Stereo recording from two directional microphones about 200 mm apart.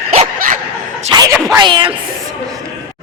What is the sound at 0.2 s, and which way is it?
Dog, 40° right (ahead or behind).